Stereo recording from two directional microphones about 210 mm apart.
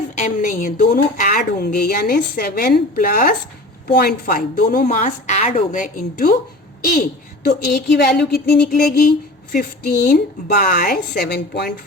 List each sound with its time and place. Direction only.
0.2 s a woman's voice: 40° left (ahead or behind)